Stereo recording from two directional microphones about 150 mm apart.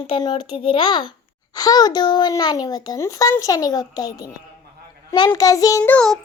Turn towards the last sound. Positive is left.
turn(degrees=5)  # may be behind; listen again after turning